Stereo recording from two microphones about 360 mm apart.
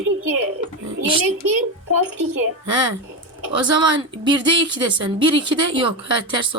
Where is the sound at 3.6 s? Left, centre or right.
Right.